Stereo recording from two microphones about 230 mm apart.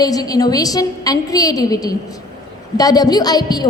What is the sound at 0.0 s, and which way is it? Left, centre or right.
A woman's voice, centre.